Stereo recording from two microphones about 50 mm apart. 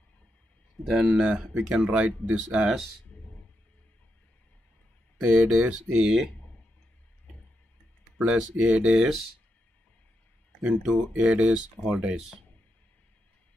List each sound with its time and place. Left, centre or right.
0.8 s speech: centre
1.3 s speech: right
5.2 s speech: centre
6.0 s speech: centre
8.2 s speech: centre
9.0 s speech: centre
10.6 s speech: centre
11.9 s speech: right